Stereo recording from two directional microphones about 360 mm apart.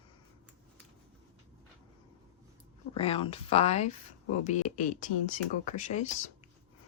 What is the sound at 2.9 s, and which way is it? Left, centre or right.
Speech, centre.